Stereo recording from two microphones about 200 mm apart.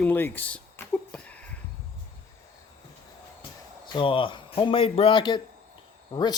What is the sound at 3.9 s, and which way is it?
Speech, 25° left (ahead or behind).